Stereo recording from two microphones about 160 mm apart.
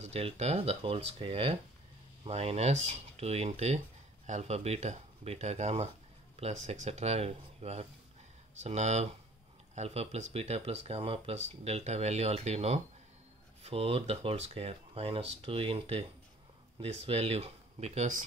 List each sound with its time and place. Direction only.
0.0 s speech: 40° right (ahead or behind)